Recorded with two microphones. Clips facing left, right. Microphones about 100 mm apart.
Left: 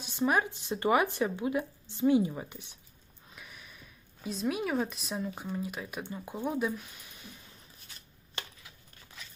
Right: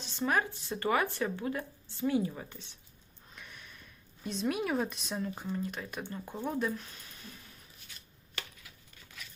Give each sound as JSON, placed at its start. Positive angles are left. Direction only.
{"t": 0.0, "sound": "speech", "side_deg": 15}
{"t": 3.2, "sound": "speech", "side_deg": 5}
{"t": 8.4, "sound": "chopping", "side_deg": 25}